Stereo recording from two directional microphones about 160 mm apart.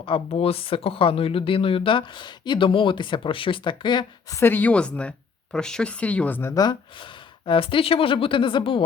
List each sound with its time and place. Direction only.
0.0 s speech: 35° left (ahead or behind)
4.4 s speech: 15° left (ahead or behind)
7.4 s speech: 35° left (ahead or behind)